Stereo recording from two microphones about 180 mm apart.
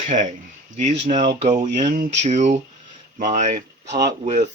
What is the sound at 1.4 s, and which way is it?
Speech, 40° right (ahead or behind).